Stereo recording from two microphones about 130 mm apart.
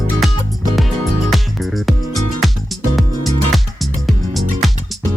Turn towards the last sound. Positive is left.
turn(degrees=0)  # may be behind; listen again after turning